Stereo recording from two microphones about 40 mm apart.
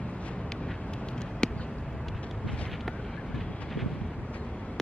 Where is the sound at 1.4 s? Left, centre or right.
Left.